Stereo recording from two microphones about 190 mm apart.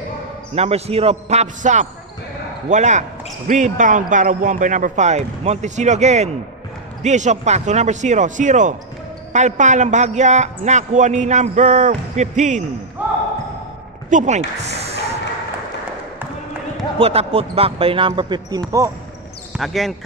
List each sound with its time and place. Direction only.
0.6 s speech: 30° right (ahead or behind)
14.1 s speech: 35° right (ahead or behind)
17.0 s speech: 30° right (ahead or behind)
19.5 s speech: centre (ahead or behind)